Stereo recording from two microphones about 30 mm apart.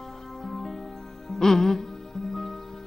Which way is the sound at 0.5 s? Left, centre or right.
Centre.